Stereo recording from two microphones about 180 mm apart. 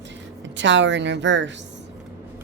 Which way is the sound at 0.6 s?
90° right.